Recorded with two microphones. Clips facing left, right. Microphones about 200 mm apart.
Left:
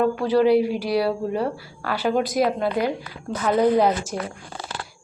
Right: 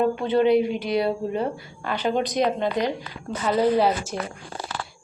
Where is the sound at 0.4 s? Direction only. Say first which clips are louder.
Left 1 dB; 5° left (ahead or behind).